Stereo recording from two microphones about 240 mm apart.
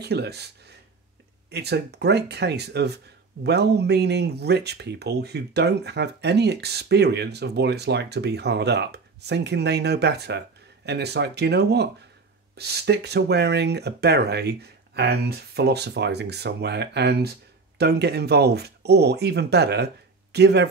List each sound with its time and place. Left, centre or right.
0.0 s speech: right